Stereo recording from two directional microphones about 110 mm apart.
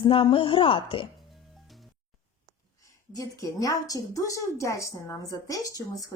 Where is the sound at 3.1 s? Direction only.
30° left (ahead or behind).